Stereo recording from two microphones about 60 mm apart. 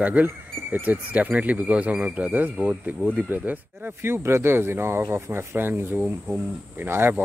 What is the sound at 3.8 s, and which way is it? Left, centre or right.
Speech, right.